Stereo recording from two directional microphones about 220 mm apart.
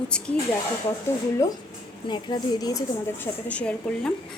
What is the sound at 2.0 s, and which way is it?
Speech, 20° left (ahead or behind).